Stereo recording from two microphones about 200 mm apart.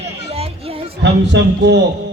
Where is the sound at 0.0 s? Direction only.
30° right (ahead or behind).